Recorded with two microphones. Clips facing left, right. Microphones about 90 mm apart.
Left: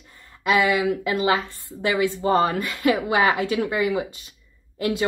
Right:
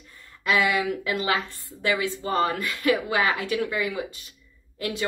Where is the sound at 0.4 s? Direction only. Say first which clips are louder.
Left 3 dB; 15° left (ahead or behind).